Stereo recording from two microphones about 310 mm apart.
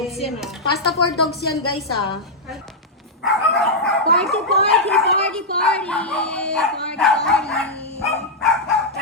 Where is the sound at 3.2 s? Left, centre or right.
Centre.